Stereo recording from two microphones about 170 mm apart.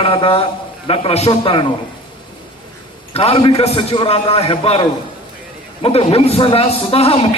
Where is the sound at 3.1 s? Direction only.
35° left (ahead or behind).